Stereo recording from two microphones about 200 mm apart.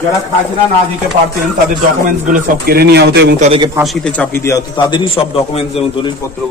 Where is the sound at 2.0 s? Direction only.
40° right (ahead or behind).